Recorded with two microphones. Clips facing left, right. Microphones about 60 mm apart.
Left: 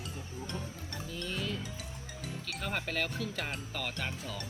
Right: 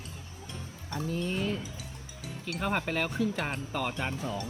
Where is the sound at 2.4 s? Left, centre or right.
Centre.